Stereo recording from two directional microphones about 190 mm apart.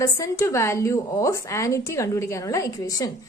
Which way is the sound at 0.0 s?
15° left (ahead or behind).